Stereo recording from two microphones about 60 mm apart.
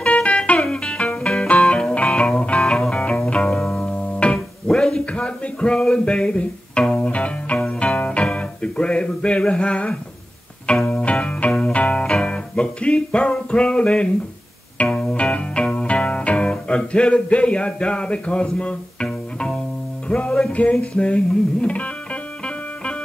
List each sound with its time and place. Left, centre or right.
0.0 s music: centre
3.4 s music: centre
3.9 s music: left
4.6 s a sound: centre
6.0 s music: centre
9.4 s a sound: centre
10.9 s music: centre